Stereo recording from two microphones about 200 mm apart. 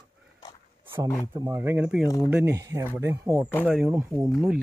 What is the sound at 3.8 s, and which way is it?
Speech, 10° right (ahead or behind).